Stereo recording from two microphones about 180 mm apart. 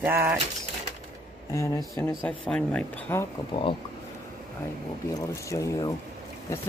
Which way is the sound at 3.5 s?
25° left (ahead or behind).